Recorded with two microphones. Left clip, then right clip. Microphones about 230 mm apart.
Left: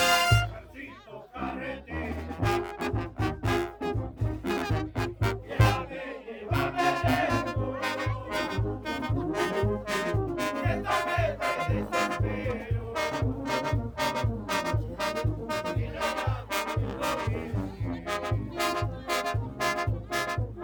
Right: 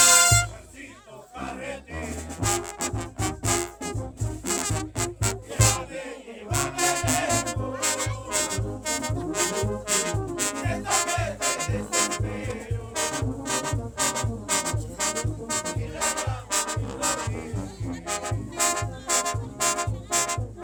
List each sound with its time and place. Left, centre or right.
2.4 s music: right
9.3 s music: right
9.8 s brass instrument: right
10.9 s music: right; by 16.2 s centre
16.8 s music: centre
18.7 s music: centre